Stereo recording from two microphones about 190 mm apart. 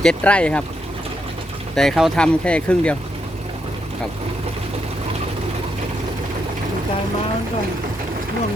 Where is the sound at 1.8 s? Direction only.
Centre (ahead or behind).